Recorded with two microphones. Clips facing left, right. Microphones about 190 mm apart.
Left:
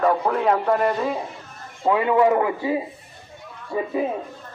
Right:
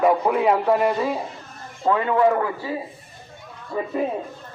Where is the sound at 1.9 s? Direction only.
15° left (ahead or behind).